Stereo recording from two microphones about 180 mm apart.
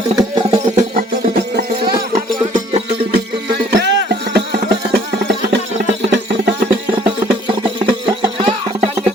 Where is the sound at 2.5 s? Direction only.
30° right (ahead or behind).